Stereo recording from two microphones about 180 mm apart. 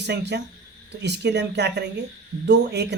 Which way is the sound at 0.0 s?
70° right (ahead or behind).